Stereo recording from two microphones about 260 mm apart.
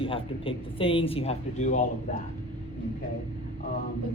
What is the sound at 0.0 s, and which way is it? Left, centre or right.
Speech, left.